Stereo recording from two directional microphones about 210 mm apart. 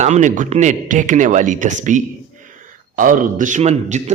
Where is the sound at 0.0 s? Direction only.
35° right (ahead or behind).